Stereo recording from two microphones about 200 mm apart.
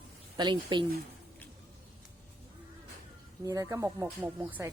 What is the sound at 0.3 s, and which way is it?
Speech, 20° right (ahead or behind).